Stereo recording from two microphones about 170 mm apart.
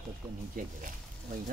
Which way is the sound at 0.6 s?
55° right (ahead or behind).